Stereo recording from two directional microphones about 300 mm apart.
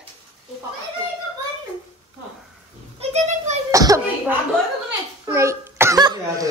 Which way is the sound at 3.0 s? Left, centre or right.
Right.